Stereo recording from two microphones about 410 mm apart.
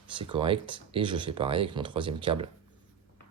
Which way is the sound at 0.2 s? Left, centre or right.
Centre.